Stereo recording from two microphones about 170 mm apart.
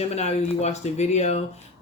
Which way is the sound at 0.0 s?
40° left (ahead or behind).